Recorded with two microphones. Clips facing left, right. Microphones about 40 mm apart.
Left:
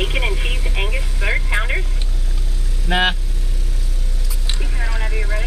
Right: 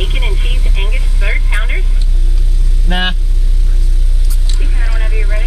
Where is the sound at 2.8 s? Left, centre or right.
Centre.